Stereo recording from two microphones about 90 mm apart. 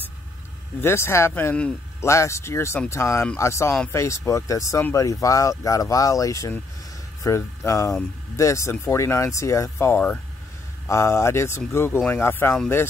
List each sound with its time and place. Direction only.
0.7 s speech: 30° left (ahead or behind)
1.5 s a man's voice: 10° left (ahead or behind)
2.0 s speech: 30° left (ahead or behind)